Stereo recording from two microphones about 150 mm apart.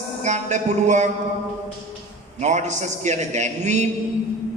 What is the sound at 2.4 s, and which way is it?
A man's voice, 50° right (ahead or behind).